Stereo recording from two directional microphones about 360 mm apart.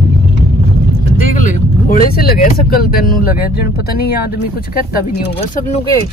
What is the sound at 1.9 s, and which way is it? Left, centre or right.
Speech, left.